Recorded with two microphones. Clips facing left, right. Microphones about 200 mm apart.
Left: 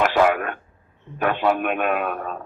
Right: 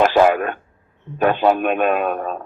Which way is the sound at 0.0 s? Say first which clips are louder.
Right 4 dB; 30° right (ahead or behind).